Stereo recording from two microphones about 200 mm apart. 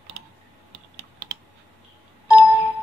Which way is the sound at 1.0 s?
55° right (ahead or behind).